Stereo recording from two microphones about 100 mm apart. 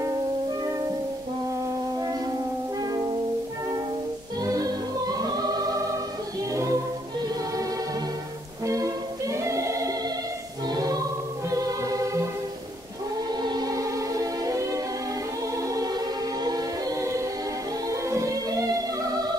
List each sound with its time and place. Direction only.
2.8 s music: 40° right (ahead or behind)
4.4 s music: 35° right (ahead or behind)
8.6 s music: 35° right (ahead or behind)
10.7 s choir: 40° right (ahead or behind)
11.5 s music: 35° right (ahead or behind)
13.3 s music: 45° right (ahead or behind)
16.4 s choir: 40° right (ahead or behind)
17.8 s music: 30° right (ahead or behind)